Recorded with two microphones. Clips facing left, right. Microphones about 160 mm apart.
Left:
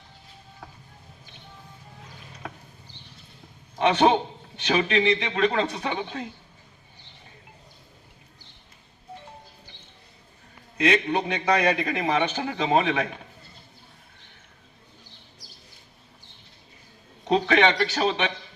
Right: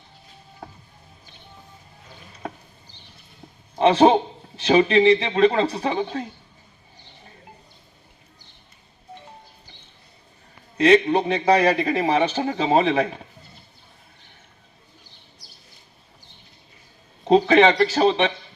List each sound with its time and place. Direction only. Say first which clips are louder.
3.8 s a man's voice: right 5 dB; 30° right (ahead or behind)
10.8 s a man's voice: right 7 dB; 35° right (ahead or behind)
17.2 s a man's voice: right 6 dB; 30° right (ahead or behind)